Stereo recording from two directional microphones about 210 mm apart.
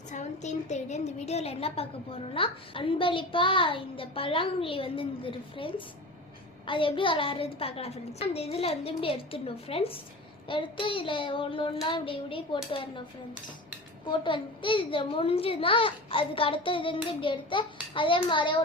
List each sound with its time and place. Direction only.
0.1 s a woman's voice: 35° left (ahead or behind)
14.0 s a woman's voice: 20° left (ahead or behind)